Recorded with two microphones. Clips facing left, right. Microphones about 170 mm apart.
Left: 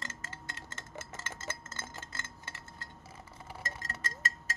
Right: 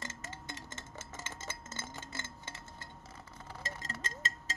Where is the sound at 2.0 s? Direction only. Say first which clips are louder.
Right 2 dB; 20° right (ahead or behind).